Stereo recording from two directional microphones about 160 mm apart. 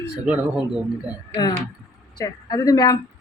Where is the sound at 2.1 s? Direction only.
25° left (ahead or behind).